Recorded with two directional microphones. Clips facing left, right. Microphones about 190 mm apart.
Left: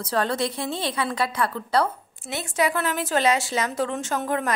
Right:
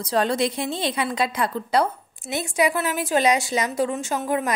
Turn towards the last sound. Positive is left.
turn(degrees=-10)  # may be behind; listen again after turning